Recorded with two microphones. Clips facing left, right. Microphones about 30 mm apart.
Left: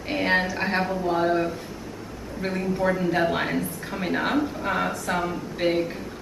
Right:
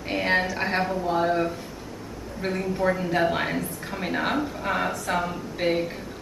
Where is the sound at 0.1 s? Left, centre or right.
Centre.